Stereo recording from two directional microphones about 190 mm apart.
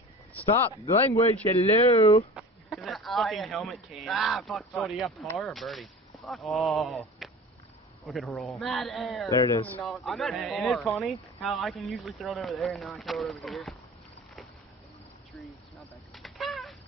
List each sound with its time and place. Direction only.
0.7 s speech: 30° left (ahead or behind)
2.3 s speech: centre (ahead or behind)
9.4 s speech: 20° left (ahead or behind)
9.8 s speech: centre (ahead or behind)
16.2 s cat: centre (ahead or behind)